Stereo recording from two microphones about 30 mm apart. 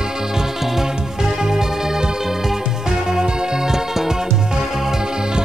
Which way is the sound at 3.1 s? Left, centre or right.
Centre.